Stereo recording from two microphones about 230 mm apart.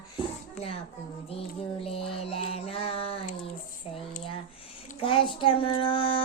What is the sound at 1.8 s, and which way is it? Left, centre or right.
Music, left.